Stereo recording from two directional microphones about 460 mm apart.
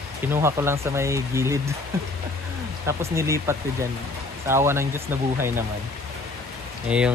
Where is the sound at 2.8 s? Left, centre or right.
Centre.